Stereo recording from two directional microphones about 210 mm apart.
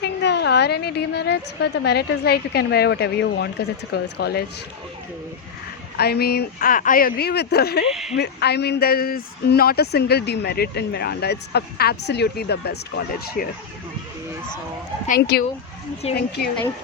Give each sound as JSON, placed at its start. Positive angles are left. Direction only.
{"t": 0.0, "sound": "speech", "side_deg": 55}
{"t": 6.0, "sound": "speech", "side_deg": 50}
{"t": 7.9, "sound": "speech", "side_deg": 0}
{"t": 8.2, "sound": "speech", "side_deg": 50}
{"t": 15.0, "sound": "speech", "side_deg": 45}
{"t": 16.0, "sound": "a woman's voice", "side_deg": 30}